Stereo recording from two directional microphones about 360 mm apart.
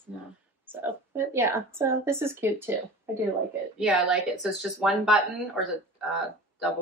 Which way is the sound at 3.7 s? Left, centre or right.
Centre.